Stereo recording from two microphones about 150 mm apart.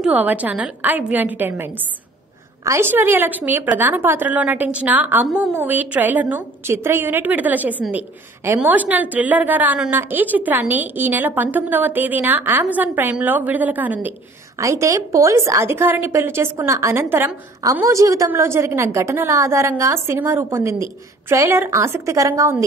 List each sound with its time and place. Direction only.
0.0 s a woman's voice: 10° right (ahead or behind)